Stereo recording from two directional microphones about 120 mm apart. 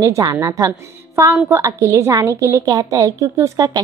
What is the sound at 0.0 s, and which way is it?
A woman's voice, 30° right (ahead or behind).